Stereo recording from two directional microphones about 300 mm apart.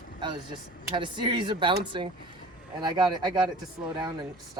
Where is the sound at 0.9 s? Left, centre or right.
Centre.